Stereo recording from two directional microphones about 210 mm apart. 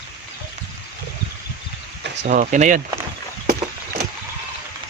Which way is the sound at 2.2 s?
35° right (ahead or behind).